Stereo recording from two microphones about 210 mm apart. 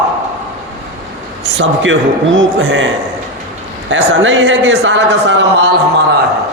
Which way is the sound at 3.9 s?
65° right (ahead or behind).